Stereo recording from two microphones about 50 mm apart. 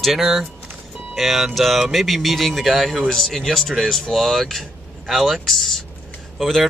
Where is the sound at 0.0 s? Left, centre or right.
Centre.